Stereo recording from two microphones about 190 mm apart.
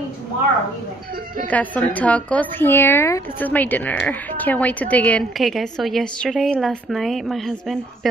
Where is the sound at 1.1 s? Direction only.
50° right (ahead or behind).